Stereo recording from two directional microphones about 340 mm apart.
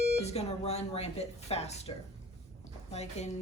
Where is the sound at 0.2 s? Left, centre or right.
Centre.